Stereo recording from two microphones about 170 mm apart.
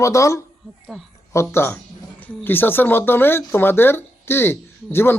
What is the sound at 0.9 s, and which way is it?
Speech, centre (ahead or behind).